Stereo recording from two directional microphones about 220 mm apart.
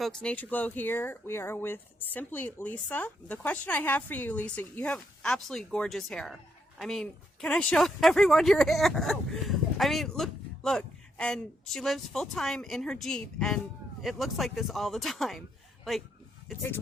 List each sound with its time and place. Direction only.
0.0 s speech: 5° left (ahead or behind)